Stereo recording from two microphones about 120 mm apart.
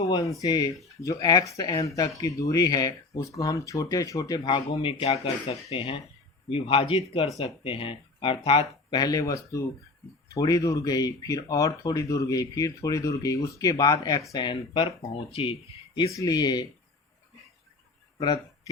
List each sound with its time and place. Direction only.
0.0 s speech: 30° left (ahead or behind)
4.4 s speech: 45° left (ahead or behind)
8.9 s speech: 35° left (ahead or behind); by 15.5 s 50° left (ahead or behind)
16.1 s speech: 35° left (ahead or behind)